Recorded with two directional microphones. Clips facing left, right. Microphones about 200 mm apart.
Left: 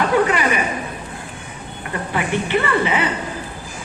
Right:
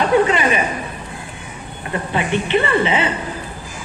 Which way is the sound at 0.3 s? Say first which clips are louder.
Right 2 dB; 25° right (ahead or behind).